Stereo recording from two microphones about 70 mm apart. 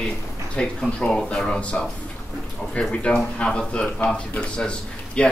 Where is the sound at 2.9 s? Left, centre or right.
Centre.